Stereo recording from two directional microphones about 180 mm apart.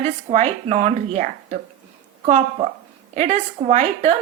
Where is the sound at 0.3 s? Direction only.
35° right (ahead or behind).